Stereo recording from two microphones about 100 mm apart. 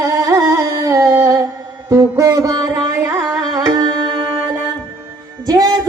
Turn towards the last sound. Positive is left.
turn(degrees=-40)  # may be behind; listen again after turning